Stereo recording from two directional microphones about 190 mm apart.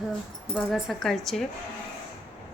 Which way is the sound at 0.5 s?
Centre (ahead or behind).